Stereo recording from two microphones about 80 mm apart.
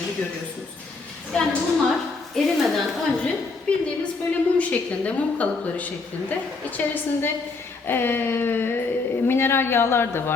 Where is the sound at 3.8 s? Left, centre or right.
Centre.